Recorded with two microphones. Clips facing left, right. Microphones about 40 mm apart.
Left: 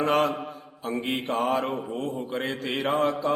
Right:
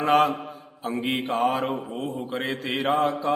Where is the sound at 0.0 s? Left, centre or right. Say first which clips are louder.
Right 3 dB; centre.